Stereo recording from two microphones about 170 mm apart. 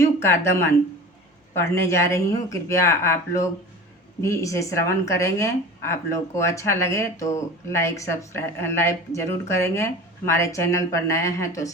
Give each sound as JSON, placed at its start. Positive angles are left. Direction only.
{"t": 0.0, "sound": "speech", "side_deg": 15}